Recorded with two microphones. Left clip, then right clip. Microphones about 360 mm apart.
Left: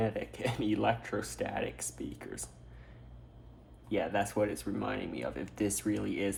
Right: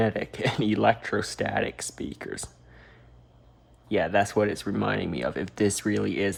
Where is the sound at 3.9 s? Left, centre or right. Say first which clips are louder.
Right 8 dB; right.